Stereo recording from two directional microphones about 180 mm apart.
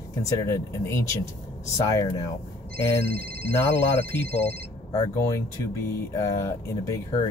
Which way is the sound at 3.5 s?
15° left (ahead or behind).